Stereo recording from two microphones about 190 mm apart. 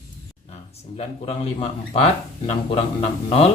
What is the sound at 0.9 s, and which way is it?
Speech, 30° left (ahead or behind).